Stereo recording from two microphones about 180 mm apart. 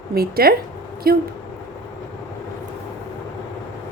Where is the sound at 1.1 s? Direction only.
55° right (ahead or behind).